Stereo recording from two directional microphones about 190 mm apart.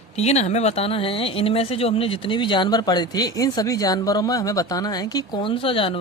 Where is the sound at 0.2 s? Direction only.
35° left (ahead or behind).